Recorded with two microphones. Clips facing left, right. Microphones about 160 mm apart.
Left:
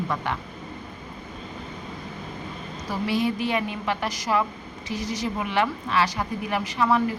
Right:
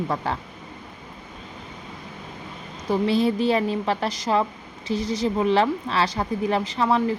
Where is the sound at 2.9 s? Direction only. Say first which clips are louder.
Right 5 dB; 30° right (ahead or behind).